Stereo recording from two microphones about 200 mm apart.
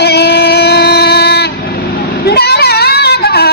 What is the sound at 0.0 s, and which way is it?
Music, 55° left (ahead or behind).